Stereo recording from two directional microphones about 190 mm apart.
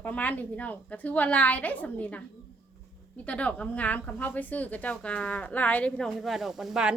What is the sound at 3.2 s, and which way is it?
A woman's voice, 5° left (ahead or behind).